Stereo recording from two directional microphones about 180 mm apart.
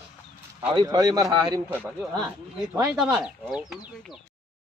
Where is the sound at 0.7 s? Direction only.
20° right (ahead or behind).